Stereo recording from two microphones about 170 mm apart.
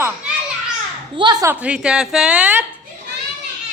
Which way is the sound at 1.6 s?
5° right (ahead or behind).